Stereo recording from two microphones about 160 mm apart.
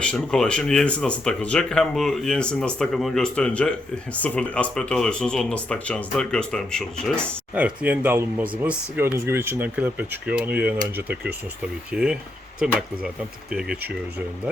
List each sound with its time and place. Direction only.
0.0 s speech: 5° left (ahead or behind)
7.5 s speech: 10° right (ahead or behind)